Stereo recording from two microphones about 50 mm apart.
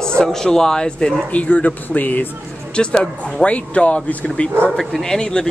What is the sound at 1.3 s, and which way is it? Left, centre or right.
Speech, left.